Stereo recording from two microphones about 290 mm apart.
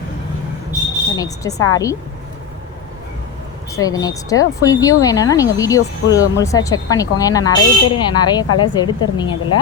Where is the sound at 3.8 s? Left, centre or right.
Centre.